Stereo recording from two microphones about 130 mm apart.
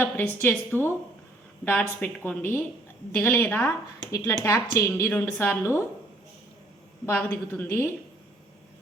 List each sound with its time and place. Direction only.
0.4 s a woman's voice: 15° left (ahead or behind)
7.0 s a woman's voice: 15° left (ahead or behind)